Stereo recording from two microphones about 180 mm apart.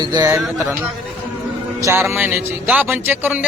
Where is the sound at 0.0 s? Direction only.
20° right (ahead or behind).